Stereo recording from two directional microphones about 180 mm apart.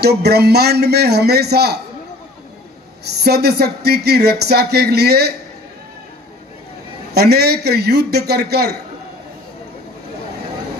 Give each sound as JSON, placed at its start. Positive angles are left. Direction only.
{"t": 0.0, "sound": "speech", "side_deg": -65}
{"t": 3.3, "sound": "speech", "side_deg": -65}
{"t": 7.1, "sound": "speech", "side_deg": -65}